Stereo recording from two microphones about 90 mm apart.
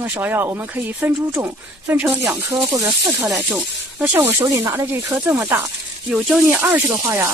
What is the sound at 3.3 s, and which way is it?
Speech, 15° right (ahead or behind).